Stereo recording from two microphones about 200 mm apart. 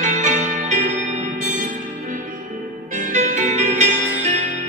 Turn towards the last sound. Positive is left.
turn(degrees=-35)  # may be behind; listen again after turning